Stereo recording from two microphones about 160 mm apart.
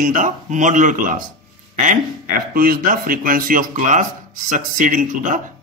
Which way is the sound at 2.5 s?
70° right (ahead or behind).